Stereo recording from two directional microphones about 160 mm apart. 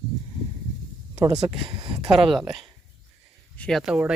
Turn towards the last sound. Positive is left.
turn(degrees=-5)  # may be behind; listen again after turning